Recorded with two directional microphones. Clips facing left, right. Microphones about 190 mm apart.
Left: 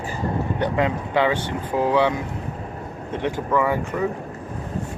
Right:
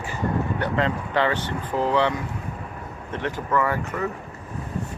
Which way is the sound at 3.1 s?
15° left (ahead or behind).